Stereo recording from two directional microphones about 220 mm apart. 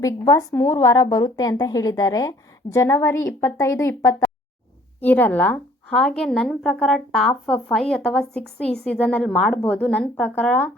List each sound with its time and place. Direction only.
0.0 s a woman's voice: 15° left (ahead or behind)